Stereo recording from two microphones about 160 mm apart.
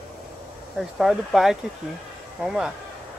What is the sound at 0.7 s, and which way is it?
Speech, centre (ahead or behind).